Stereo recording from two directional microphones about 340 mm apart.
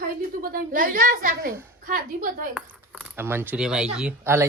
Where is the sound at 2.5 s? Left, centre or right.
Centre.